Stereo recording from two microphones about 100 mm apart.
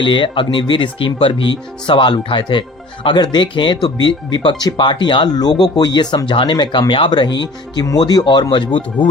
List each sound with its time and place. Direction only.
0.0 s speech: 55° left (ahead or behind)